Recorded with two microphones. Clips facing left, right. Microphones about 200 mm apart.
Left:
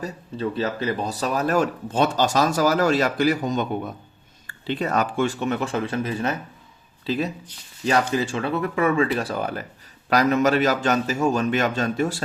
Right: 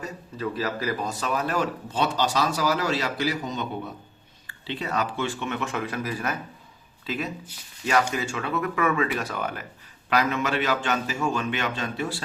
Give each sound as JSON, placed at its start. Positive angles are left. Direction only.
{"t": 0.0, "sound": "a man's voice", "side_deg": 30}